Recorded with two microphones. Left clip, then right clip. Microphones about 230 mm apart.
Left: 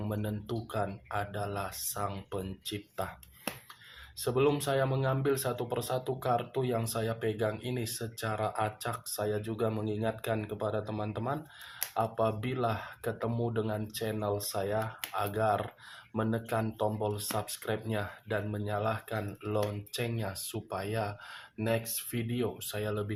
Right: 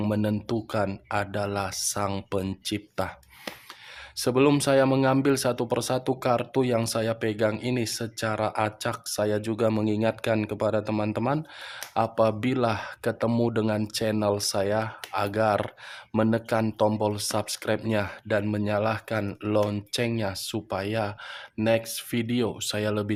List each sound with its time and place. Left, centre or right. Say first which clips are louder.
0.0 s speech: right 10 dB; right
4.2 s speech: right 7 dB; right